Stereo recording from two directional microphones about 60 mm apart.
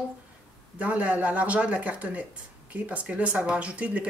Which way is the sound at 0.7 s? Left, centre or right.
Right.